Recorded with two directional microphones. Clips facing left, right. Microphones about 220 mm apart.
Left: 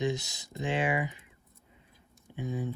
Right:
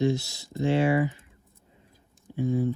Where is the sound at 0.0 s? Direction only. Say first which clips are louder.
Right 6 dB; 20° left (ahead or behind).